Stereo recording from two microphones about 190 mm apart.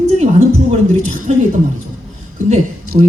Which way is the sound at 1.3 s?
35° right (ahead or behind).